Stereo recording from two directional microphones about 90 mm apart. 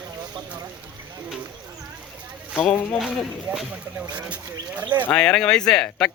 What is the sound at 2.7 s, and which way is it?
Speech, 20° left (ahead or behind).